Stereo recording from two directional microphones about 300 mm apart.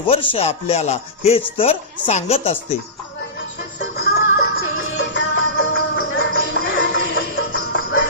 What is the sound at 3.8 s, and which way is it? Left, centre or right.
Music, left.